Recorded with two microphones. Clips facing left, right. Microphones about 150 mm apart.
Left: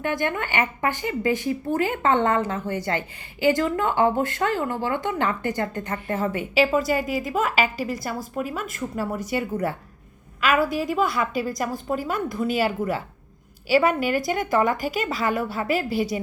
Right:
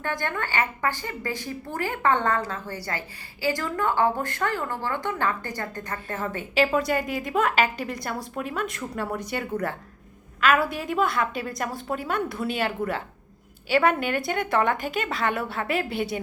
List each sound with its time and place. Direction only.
0.0 s a woman's voice: 15° left (ahead or behind)
6.3 s a woman's voice: 5° left (ahead or behind)